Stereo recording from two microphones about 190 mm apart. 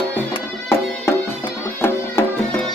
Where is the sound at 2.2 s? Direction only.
15° left (ahead or behind).